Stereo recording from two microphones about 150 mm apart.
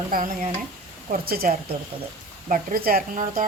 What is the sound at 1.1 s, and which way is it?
Speech, 75° right (ahead or behind).